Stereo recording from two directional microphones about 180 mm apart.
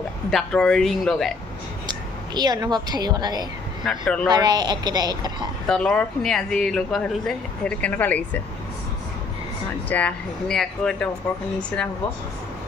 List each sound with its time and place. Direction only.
0.3 s speech: 5° left (ahead or behind)
1.9 s a woman's voice: 25° right (ahead or behind)
3.8 s speech: centre (ahead or behind)
4.3 s speech: 20° right (ahead or behind)
5.7 s speech: 5° left (ahead or behind)
9.8 s speech: 10° left (ahead or behind)